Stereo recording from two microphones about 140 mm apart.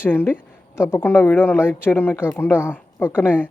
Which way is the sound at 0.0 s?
15° left (ahead or behind).